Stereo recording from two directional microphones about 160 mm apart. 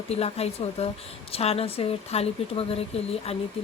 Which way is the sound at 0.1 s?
40° left (ahead or behind).